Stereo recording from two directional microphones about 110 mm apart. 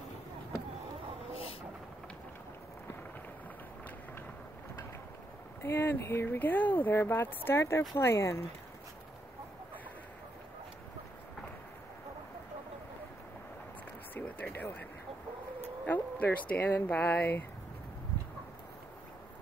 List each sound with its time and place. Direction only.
5.6 s speech: 20° left (ahead or behind)
14.1 s a sound: 15° left (ahead or behind)
15.9 s speech: 15° left (ahead or behind)